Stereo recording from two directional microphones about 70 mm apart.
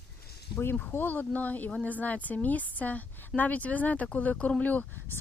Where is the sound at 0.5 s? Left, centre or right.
Left.